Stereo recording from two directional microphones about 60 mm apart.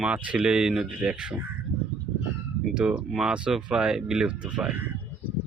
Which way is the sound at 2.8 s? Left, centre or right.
Centre.